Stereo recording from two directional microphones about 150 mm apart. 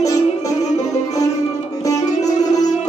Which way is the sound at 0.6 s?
50° left (ahead or behind).